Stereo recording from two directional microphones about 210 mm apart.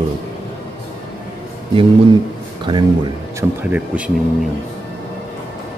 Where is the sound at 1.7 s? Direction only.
25° right (ahead or behind).